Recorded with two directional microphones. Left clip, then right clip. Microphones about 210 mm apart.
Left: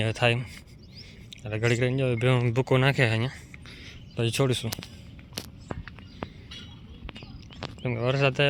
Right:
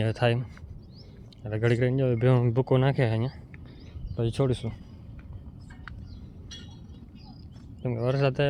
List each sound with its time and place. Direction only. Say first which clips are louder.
0.0 s speech: left 2 dB; 20° right (ahead or behind)
1.5 s speech: even; 15° right (ahead or behind)
7.8 s speech: left 1 dB; 10° right (ahead or behind)